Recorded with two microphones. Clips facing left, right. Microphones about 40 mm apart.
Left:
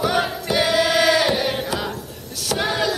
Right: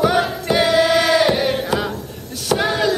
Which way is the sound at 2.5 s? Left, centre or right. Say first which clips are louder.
Right 4 dB; centre.